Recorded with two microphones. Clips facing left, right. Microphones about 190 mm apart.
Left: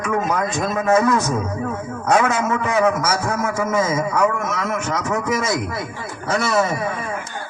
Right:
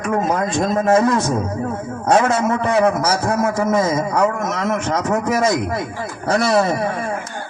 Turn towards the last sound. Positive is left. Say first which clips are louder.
# right 3 dB
turn(degrees=-35)  # may be behind; listen again after turning